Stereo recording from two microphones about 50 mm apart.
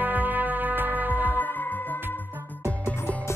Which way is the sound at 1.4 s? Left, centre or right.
Left.